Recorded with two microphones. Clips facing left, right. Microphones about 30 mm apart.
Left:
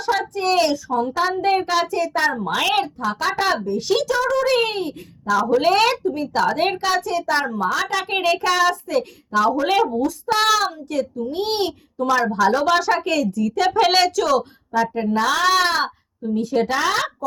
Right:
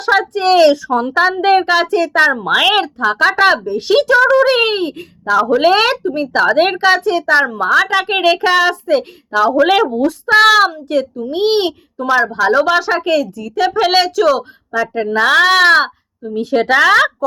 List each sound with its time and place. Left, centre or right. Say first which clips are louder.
0.0 s a sound: right 7 dB; right
0.7 s a woman's voice: right 7 dB; right
14.7 s speech: right 3 dB; right